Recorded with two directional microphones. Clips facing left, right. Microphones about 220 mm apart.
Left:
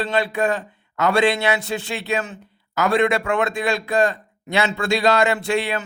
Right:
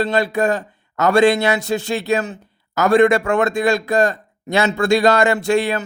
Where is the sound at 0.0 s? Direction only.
40° right (ahead or behind).